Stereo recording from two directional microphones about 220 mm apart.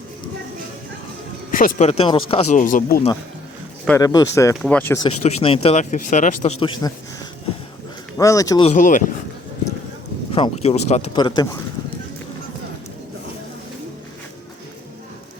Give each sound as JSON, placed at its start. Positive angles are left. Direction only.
{"t": 1.5, "sound": "speech", "side_deg": 40}
{"t": 2.6, "sound": "speech", "side_deg": 35}
{"t": 3.8, "sound": "speech", "side_deg": 15}
{"t": 5.0, "sound": "speech", "side_deg": 25}
{"t": 6.6, "sound": "speech", "side_deg": 20}
{"t": 8.2, "sound": "speech", "side_deg": 15}
{"t": 8.7, "sound": "speech", "side_deg": 35}
{"t": 10.3, "sound": "speech", "side_deg": 25}